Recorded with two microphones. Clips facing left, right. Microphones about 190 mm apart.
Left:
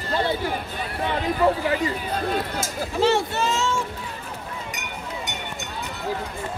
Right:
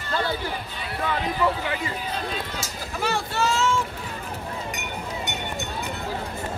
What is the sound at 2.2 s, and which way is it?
Speech, 55° left (ahead or behind).